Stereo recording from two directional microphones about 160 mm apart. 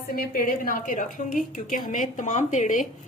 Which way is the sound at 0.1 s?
65° left (ahead or behind).